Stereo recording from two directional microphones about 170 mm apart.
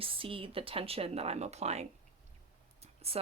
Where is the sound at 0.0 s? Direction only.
30° right (ahead or behind).